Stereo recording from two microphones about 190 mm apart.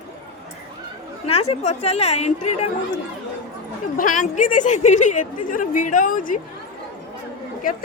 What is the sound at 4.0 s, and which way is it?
A woman's voice, 45° left (ahead or behind).